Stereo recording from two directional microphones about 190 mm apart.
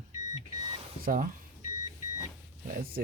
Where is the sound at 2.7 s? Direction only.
50° right (ahead or behind).